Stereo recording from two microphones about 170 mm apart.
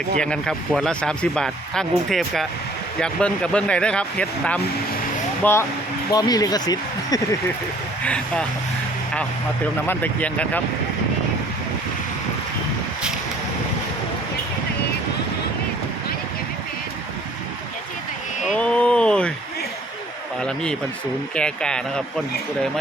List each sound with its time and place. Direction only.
0.2 s speech: 5° left (ahead or behind); by 7.2 s 20° left (ahead or behind)
8.0 s speech: 5° left (ahead or behind)
9.8 s speech: 10° left (ahead or behind)
18.5 s speech: 5° left (ahead or behind)
20.4 s speech: 5° left (ahead or behind)